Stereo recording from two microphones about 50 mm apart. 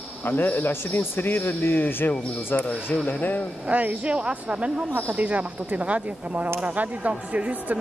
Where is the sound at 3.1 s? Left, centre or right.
Left.